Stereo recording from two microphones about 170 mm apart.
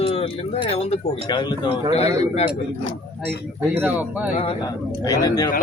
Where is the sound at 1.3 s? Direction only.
25° left (ahead or behind).